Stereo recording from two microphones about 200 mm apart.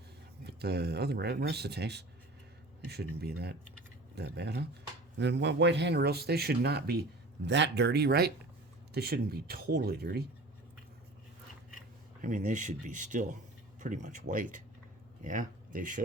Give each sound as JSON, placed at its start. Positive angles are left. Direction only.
{"t": 0.4, "sound": "speech", "side_deg": -55}
{"t": 12.2, "sound": "speech", "side_deg": -40}